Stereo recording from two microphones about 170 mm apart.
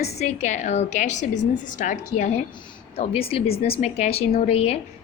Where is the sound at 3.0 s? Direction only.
35° left (ahead or behind).